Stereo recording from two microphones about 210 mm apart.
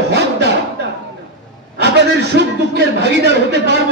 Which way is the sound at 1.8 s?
55° right (ahead or behind).